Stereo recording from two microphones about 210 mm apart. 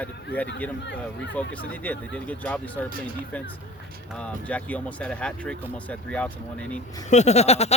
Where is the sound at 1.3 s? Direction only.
5° left (ahead or behind).